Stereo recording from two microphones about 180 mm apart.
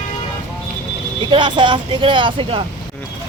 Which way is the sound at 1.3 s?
25° right (ahead or behind).